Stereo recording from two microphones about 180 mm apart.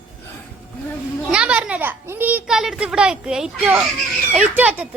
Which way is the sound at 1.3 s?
5° right (ahead or behind).